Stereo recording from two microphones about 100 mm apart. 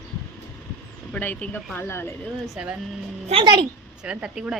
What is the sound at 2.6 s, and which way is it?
Speech, 10° right (ahead or behind).